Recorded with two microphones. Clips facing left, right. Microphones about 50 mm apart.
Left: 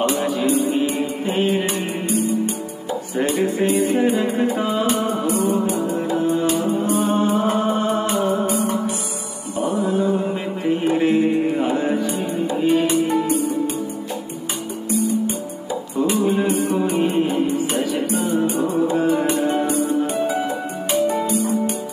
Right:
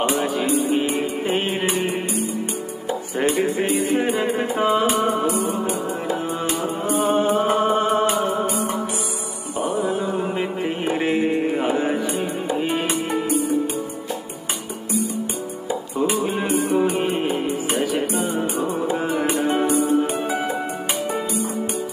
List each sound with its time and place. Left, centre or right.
0.4 s music: centre
0.7 s music: right
3.3 s music: right
3.7 s music: centre
4.3 s music: right
5.3 s music: centre
5.7 s music: centre
7.0 s music: right
9.8 s music: centre
15.7 s music: centre
16.4 s music: right
16.8 s music: centre
18.9 s music: centre
20.9 s music: centre